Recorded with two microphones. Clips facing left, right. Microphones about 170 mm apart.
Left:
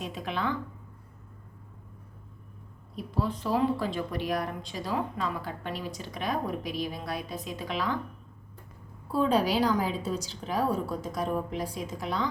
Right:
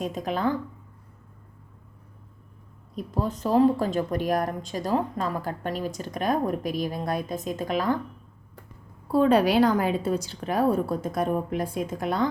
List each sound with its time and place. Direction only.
0.0 s speech: 40° right (ahead or behind)
2.9 s speech: 45° right (ahead or behind)
9.1 s a woman's voice: 60° right (ahead or behind)